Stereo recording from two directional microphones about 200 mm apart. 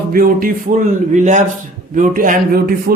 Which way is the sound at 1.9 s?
45° right (ahead or behind).